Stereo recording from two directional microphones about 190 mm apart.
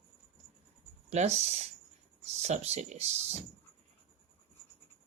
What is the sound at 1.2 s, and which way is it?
A man's voice, 35° right (ahead or behind).